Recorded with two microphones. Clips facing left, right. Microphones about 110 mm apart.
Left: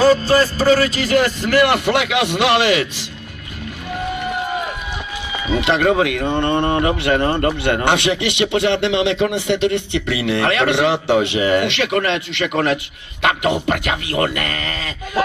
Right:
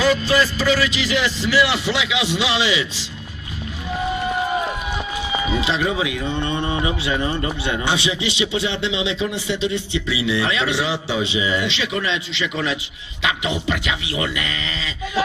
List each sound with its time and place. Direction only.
0.0 s speech: 40° left (ahead or behind)
5.5 s speech: 55° left (ahead or behind)